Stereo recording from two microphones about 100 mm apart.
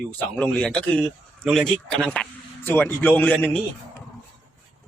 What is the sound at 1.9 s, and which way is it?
A man's voice, 10° left (ahead or behind).